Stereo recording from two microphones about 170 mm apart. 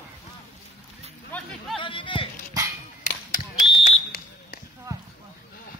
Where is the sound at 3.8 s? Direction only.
60° left (ahead or behind).